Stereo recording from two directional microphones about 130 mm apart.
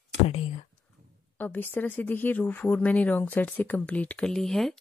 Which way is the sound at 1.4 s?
15° left (ahead or behind).